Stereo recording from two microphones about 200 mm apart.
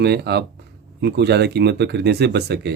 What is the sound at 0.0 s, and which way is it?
Speech, 55° right (ahead or behind).